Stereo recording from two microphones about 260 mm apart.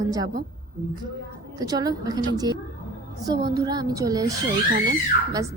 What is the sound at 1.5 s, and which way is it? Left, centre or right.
A woman's voice, centre.